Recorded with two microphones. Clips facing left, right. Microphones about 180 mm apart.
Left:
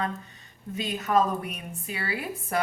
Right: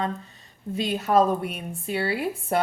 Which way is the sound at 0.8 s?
30° right (ahead or behind).